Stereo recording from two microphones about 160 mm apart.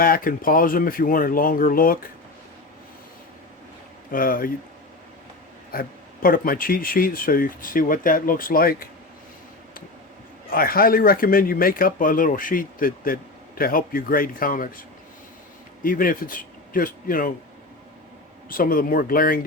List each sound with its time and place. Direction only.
0.0 s speech: 65° left (ahead or behind)
4.1 s speech: 60° left (ahead or behind)
5.7 s speech: 65° left (ahead or behind)
10.5 s speech: 65° left (ahead or behind)
15.8 s speech: 60° left (ahead or behind)
18.4 s speech: 60° left (ahead or behind)